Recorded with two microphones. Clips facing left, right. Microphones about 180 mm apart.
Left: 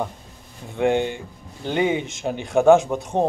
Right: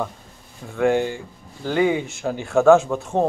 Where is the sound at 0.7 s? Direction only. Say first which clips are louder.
Right 1 dB; 20° left (ahead or behind).